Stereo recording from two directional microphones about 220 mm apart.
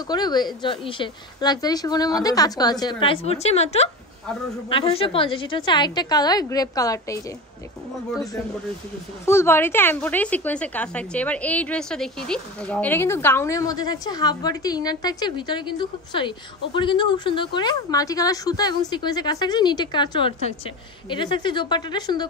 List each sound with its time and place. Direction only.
0.1 s a woman's voice: 20° left (ahead or behind)
9.2 s a woman's voice: 10° left (ahead or behind)